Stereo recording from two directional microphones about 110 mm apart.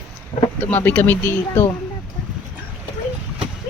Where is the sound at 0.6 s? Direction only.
15° left (ahead or behind).